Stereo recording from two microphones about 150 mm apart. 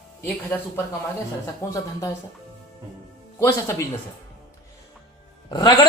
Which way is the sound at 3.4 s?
15° left (ahead or behind).